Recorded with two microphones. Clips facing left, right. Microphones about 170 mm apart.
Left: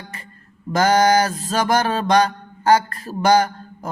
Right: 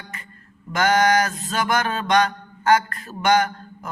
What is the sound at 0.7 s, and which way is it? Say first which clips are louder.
Mantra: left 3 dB; 35° left (ahead or behind).